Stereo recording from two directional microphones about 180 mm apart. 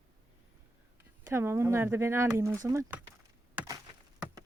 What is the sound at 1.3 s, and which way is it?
Speech, 15° right (ahead or behind).